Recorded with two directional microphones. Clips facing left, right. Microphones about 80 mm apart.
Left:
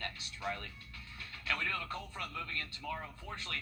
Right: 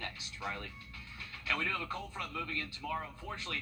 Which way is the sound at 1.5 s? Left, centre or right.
Centre.